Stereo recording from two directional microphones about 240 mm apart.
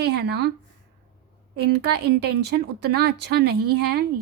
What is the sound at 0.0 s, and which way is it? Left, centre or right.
Speech, right.